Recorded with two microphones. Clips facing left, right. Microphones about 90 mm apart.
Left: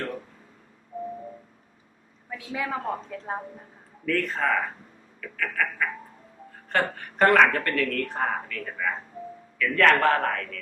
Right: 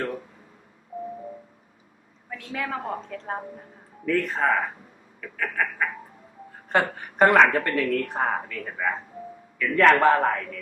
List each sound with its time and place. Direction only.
2.3 s a woman's voice: 5° left (ahead or behind)
4.0 s speech: 10° right (ahead or behind)